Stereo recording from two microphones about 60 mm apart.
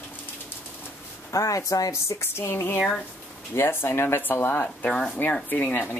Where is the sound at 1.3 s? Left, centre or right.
Left.